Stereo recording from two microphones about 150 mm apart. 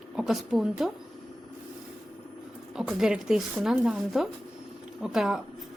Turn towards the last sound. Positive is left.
turn(degrees=-5)  # may be behind; listen again after turning